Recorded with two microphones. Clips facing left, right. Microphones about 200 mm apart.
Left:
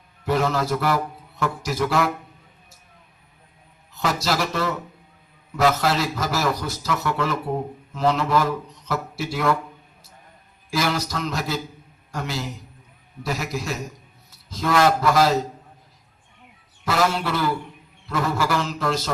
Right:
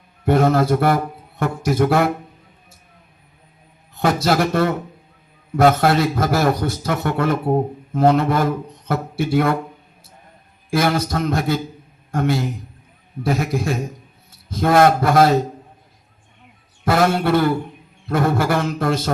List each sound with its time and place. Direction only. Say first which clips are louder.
0.3 s a man's voice: right 6 dB; 55° right (ahead or behind)
3.9 s a man's voice: right 6 dB; 55° right (ahead or behind)
10.7 s a man's voice: right 5 dB; 55° right (ahead or behind)
16.8 s a man's voice: right 5 dB; 55° right (ahead or behind)